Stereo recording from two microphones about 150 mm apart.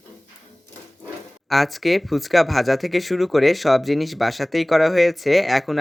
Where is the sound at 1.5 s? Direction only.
Centre (ahead or behind).